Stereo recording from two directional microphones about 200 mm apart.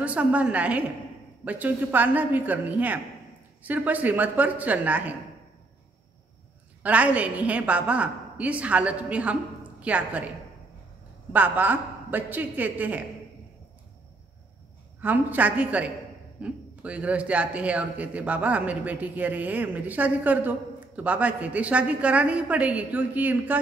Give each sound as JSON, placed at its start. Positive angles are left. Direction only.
{"t": 0.0, "sound": "a man's voice", "side_deg": -5}
{"t": 6.8, "sound": "a man's voice", "side_deg": -5}
{"t": 11.3, "sound": "a man's voice", "side_deg": -10}
{"t": 15.0, "sound": "a man's voice", "side_deg": -10}